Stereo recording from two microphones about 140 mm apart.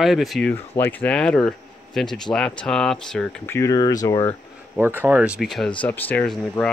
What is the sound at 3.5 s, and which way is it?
Speech, 20° left (ahead or behind).